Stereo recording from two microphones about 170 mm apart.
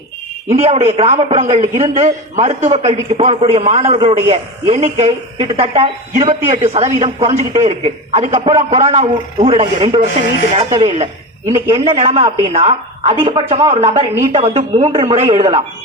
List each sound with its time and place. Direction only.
0.5 s a man's voice: 35° right (ahead or behind)